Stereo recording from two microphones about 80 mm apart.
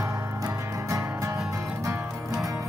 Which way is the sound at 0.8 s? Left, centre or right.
Right.